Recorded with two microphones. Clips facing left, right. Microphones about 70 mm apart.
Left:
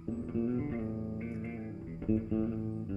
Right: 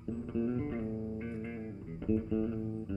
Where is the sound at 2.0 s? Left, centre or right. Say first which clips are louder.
Even; left.